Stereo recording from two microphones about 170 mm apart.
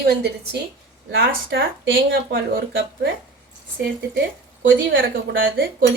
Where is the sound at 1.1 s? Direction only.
90° right.